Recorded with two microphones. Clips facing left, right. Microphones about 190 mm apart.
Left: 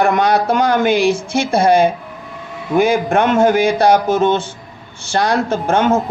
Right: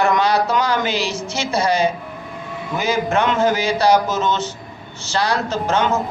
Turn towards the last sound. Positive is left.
turn(degrees=55)  # may be behind; listen again after turning